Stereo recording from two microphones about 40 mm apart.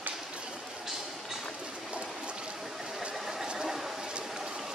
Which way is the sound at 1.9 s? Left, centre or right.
Right.